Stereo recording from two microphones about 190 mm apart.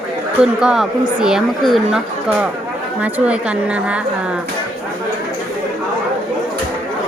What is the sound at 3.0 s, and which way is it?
Speech, 5° right (ahead or behind).